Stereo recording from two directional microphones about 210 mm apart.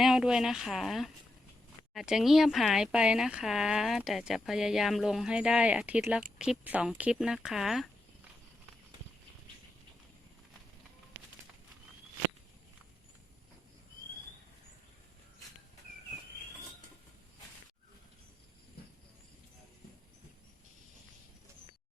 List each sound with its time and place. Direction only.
0.0 s speech: 5° right (ahead or behind)